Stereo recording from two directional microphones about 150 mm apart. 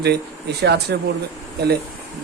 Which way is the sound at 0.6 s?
90° right.